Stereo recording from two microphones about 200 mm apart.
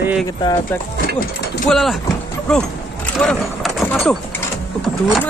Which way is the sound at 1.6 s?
Centre (ahead or behind).